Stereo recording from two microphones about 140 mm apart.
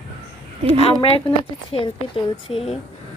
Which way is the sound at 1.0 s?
40° left (ahead or behind).